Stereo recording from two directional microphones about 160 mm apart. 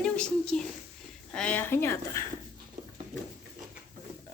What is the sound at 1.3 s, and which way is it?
Speech, 5° left (ahead or behind).